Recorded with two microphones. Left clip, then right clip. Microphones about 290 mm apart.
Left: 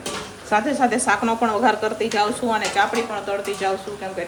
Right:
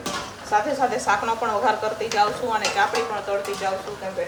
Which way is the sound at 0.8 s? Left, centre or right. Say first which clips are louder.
Left 2 dB; left.